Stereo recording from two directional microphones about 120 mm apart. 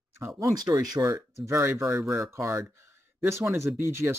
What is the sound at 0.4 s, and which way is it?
Speech, 30° right (ahead or behind).